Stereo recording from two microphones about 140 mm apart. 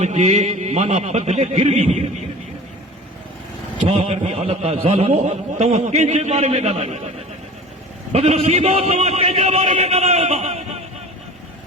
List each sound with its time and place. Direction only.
0.0 s a man's voice: 50° right (ahead or behind)
3.8 s a man's voice: 45° right (ahead or behind)
8.1 s a man's voice: 50° right (ahead or behind)